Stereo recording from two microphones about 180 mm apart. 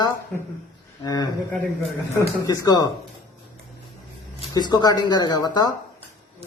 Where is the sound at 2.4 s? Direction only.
20° left (ahead or behind).